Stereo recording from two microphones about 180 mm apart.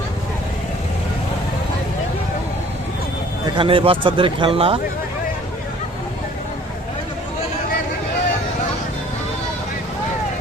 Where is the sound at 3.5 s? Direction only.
30° right (ahead or behind).